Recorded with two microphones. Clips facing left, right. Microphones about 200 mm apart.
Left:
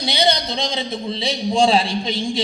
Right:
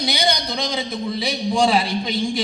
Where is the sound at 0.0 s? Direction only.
25° left (ahead or behind).